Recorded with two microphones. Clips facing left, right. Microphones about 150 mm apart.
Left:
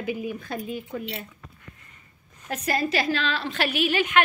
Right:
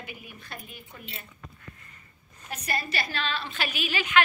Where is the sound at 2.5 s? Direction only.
90° left; by 4.1 s 60° left (ahead or behind).